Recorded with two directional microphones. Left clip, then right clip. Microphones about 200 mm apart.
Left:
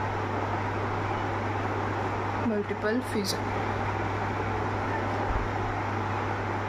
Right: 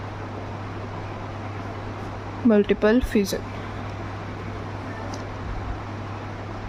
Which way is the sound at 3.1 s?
50° right (ahead or behind).